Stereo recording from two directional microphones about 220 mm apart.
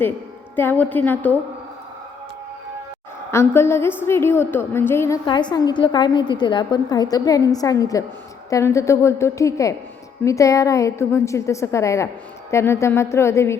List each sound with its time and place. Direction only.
0.5 s a woman's voice: 10° left (ahead or behind)
3.3 s a woman's voice: 10° left (ahead or behind)